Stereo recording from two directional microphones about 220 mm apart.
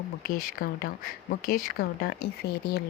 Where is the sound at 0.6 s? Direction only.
45° left (ahead or behind).